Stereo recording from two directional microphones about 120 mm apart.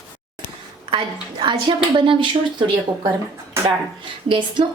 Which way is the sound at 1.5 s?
45° right (ahead or behind).